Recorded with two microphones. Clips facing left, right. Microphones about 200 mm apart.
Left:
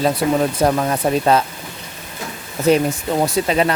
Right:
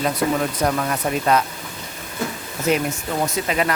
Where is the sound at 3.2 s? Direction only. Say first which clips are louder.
Left 4 dB; 30° left (ahead or behind).